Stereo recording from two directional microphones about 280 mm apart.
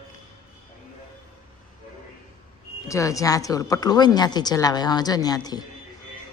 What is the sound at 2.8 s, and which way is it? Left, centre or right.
Speech, centre.